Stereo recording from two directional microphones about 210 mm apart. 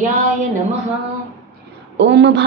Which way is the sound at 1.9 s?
55° right (ahead or behind).